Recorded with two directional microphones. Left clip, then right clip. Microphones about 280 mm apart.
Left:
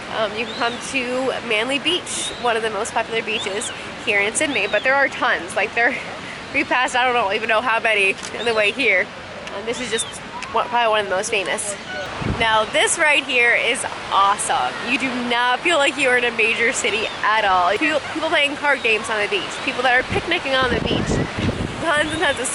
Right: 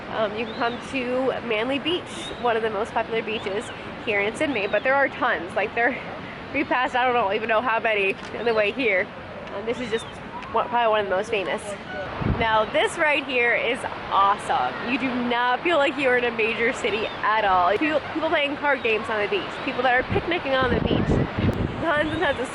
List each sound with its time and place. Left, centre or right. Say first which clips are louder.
0.2 s speech: left 3 dB; centre
10.6 s speech: left 3 dB; centre
21.8 s speech: left 4 dB; centre